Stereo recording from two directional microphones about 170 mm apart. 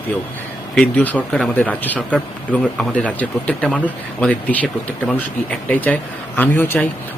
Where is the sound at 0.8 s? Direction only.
10° left (ahead or behind).